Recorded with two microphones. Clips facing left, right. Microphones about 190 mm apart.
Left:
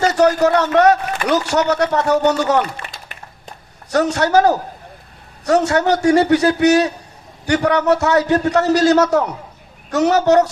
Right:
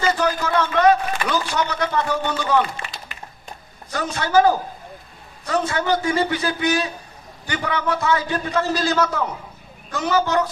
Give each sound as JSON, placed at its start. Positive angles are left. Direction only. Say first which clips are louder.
{"t": 0.1, "sound": "a sound", "louder": "left 7 dB", "side_deg": 75}
{"t": 0.7, "sound": "a man's voice", "louder": "left 3 dB", "side_deg": 70}
{"t": 2.1, "sound": "speech", "louder": "left 9 dB", "side_deg": 40}
{"t": 2.4, "sound": "a man's voice", "louder": "left 3 dB", "side_deg": 70}
{"t": 3.9, "sound": "a man's voice", "louder": "left 5 dB", "side_deg": 75}